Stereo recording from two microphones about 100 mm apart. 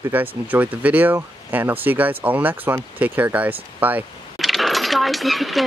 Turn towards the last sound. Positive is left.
turn(degrees=0)  # may be behind; listen again after turning